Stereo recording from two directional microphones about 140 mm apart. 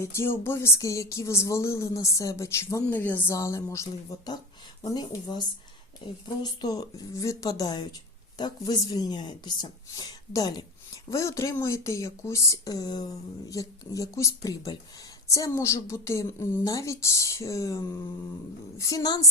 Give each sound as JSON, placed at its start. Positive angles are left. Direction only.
{"t": 0.0, "sound": "speech", "side_deg": 20}